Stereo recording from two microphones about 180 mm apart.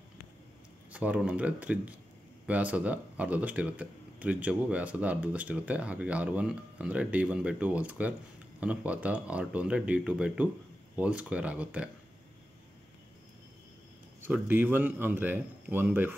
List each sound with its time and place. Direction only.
0.9 s speech: 10° right (ahead or behind)
14.2 s speech: 10° right (ahead or behind)